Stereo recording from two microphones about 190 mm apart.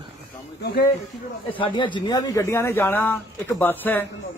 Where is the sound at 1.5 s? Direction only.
25° left (ahead or behind).